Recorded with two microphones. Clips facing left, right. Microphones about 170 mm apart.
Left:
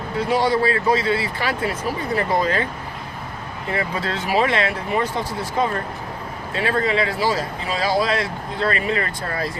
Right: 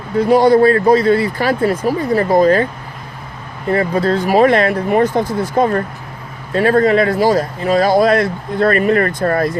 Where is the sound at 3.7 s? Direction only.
45° right (ahead or behind).